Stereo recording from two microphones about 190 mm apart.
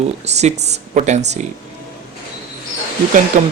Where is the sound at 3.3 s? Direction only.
40° right (ahead or behind).